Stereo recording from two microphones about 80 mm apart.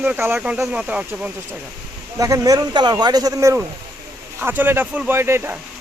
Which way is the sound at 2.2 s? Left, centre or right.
Right.